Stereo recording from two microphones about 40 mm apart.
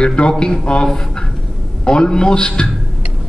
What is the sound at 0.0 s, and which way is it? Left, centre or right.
A man's voice, left.